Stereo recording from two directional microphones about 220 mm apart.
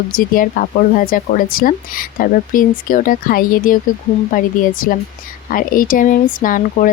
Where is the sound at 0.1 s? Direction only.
40° left (ahead or behind).